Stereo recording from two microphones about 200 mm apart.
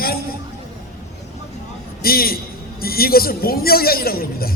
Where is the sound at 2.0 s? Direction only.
50° left (ahead or behind).